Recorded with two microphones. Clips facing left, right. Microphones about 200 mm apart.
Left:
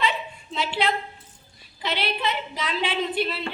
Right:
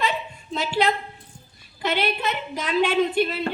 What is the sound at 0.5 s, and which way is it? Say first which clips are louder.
A woman's voice: right 3 dB; 45° right (ahead or behind).